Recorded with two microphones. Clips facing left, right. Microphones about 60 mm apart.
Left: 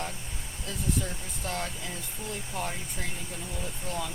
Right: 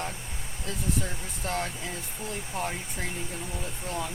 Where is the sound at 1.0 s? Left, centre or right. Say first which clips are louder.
Right 2 dB; centre.